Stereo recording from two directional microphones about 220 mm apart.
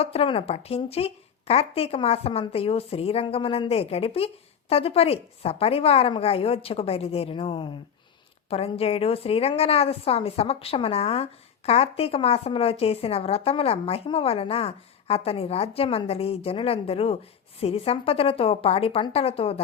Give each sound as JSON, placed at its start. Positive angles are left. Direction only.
{"t": 0.0, "sound": "a woman's voice", "side_deg": 25}